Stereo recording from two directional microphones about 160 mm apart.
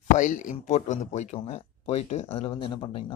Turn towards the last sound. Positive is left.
turn(degrees=30)  # may be behind; listen again after turning